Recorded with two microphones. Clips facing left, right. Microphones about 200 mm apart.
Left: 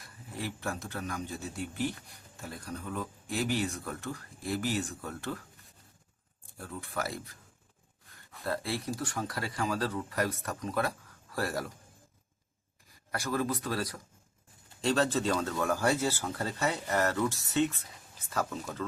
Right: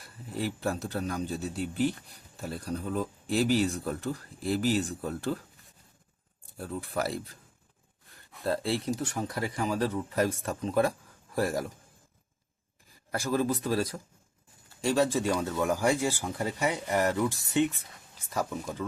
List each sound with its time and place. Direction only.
0.4 s a man's voice: 35° right (ahead or behind)
6.7 s a man's voice: 30° right (ahead or behind)
8.4 s speech: 30° right (ahead or behind)
13.1 s speech: 25° right (ahead or behind)
14.8 s speech: 10° right (ahead or behind)